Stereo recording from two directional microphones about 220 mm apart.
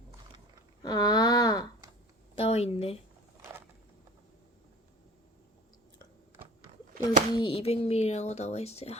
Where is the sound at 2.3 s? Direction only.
25° left (ahead or behind).